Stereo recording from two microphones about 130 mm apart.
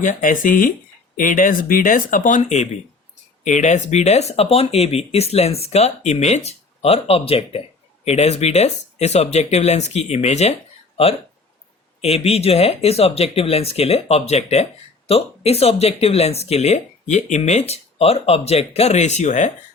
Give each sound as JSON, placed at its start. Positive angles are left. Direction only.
{"t": 0.0, "sound": "speech", "side_deg": 85}
{"t": 12.0, "sound": "speech", "side_deg": 50}